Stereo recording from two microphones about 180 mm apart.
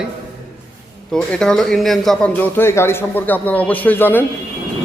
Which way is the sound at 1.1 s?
5° left (ahead or behind).